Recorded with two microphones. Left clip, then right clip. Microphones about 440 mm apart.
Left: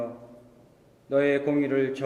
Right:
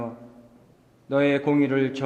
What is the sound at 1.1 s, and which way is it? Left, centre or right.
Speech, right.